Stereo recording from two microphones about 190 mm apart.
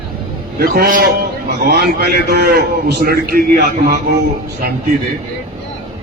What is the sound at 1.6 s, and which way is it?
A man's voice, 55° right (ahead or behind).